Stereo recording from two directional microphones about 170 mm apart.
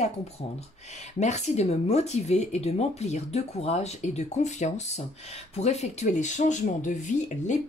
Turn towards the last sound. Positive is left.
turn(degrees=45)  # may be behind; listen again after turning